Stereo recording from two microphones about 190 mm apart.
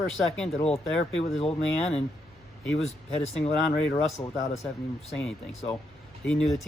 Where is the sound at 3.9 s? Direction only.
15° left (ahead or behind).